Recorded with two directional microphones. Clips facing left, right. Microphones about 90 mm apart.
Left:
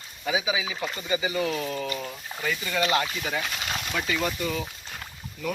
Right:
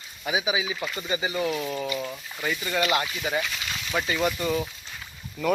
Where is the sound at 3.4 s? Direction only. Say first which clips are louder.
Left 2 dB; 40° left (ahead or behind).